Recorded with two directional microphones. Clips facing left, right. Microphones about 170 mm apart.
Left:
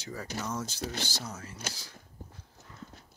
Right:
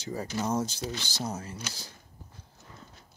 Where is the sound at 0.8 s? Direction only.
50° left (ahead or behind).